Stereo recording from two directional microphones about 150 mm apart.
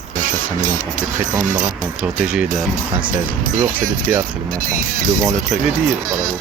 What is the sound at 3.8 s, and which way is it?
Speech, 65° right (ahead or behind).